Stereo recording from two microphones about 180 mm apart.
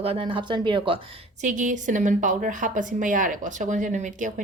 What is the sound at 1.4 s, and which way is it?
A woman's voice, 45° right (ahead or behind).